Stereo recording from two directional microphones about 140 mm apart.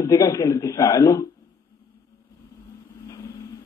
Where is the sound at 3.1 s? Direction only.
25° left (ahead or behind).